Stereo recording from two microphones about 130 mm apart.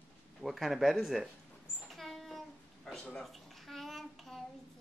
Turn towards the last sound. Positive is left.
turn(degrees=0)  # may be behind; listen again after turning